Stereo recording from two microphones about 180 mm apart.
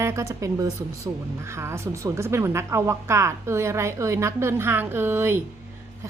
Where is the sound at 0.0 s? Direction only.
15° right (ahead or behind).